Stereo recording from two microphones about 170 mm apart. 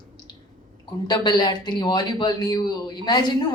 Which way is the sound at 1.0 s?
25° left (ahead or behind).